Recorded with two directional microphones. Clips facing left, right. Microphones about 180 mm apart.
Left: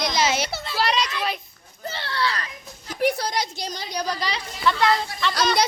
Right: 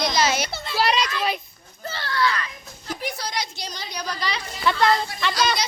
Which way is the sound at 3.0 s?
50° left (ahead or behind).